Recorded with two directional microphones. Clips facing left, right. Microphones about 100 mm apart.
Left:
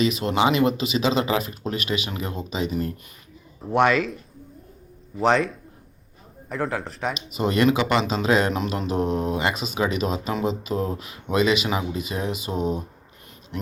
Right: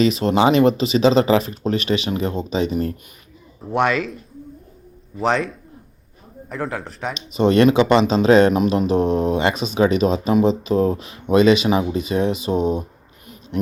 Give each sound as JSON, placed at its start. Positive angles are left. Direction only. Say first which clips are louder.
{"t": 0.0, "sound": "speech", "louder": "right 5 dB", "side_deg": -35}
{"t": 3.6, "sound": "speech", "louder": "even", "side_deg": 0}
{"t": 7.3, "sound": "speech", "louder": "right 7 dB", "side_deg": -30}